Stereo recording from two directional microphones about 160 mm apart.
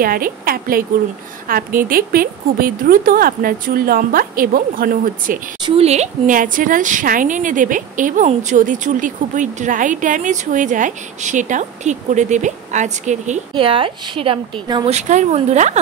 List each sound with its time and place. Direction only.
0.0 s a woman's voice: 65° right (ahead or behind)
5.8 s speech: 45° right (ahead or behind)
13.6 s a woman's voice: 35° right (ahead or behind)
14.9 s speech: 45° right (ahead or behind)